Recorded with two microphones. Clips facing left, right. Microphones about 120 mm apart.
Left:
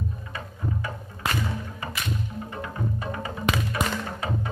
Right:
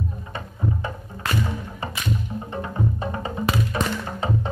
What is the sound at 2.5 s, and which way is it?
Music, 25° right (ahead or behind).